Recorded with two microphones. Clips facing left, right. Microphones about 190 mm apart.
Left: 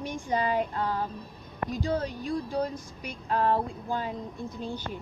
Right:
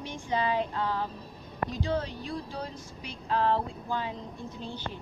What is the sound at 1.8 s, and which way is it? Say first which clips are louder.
Music: left 2 dB; 40° left (ahead or behind).